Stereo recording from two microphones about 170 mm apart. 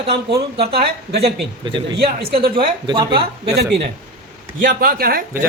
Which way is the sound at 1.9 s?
65° right (ahead or behind).